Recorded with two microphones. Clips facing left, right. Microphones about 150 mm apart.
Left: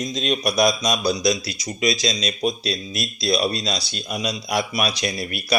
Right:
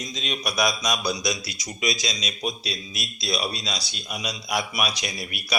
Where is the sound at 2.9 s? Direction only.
35° left (ahead or behind).